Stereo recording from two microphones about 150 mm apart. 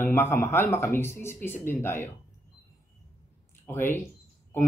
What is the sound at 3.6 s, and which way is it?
Speech, 15° left (ahead or behind).